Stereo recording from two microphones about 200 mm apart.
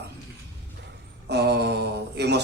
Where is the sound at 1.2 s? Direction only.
55° right (ahead or behind).